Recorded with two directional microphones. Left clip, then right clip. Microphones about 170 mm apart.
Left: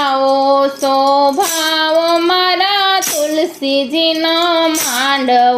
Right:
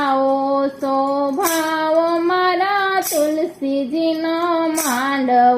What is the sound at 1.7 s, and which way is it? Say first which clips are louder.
Music: left 6 dB; 45° left (ahead or behind).